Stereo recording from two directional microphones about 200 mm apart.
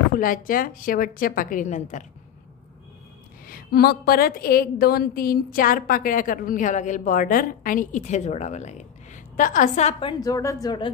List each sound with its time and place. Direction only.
0.1 s a woman's voice: 45° left (ahead or behind)
3.4 s a woman's voice: 45° left (ahead or behind); by 10.9 s 20° left (ahead or behind)